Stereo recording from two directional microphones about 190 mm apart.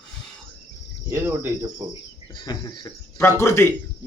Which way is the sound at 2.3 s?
25° left (ahead or behind).